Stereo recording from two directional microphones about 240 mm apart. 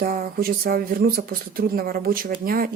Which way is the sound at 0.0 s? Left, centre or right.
Right.